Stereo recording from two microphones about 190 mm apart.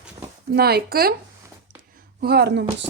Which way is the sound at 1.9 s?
55° right (ahead or behind).